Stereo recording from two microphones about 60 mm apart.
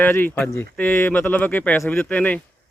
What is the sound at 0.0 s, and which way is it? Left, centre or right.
A man's voice, left.